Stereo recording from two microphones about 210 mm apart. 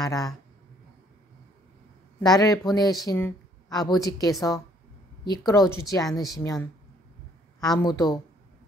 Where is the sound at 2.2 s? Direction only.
15° left (ahead or behind).